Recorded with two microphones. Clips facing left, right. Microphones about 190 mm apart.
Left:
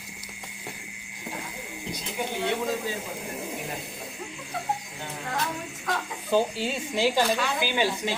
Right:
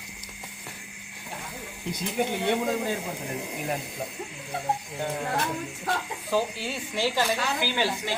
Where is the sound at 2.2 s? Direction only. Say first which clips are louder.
Right 5 dB; 55° right (ahead or behind).